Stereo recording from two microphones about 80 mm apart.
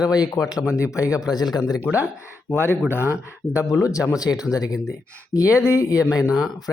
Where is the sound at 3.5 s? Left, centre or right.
Left.